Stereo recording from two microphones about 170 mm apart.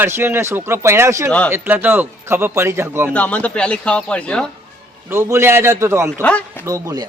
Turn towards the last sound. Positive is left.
turn(degrees=-20)  # may be behind; listen again after turning